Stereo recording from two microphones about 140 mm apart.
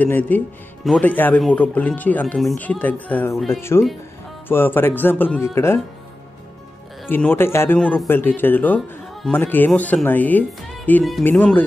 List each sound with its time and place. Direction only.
0.0 s speech: 10° left (ahead or behind)
7.1 s speech: 15° left (ahead or behind)